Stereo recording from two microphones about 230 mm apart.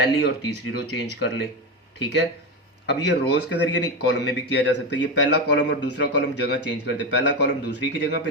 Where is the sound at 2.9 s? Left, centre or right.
Left.